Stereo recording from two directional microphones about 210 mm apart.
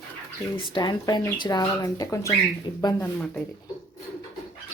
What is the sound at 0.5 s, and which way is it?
Speech, 20° left (ahead or behind).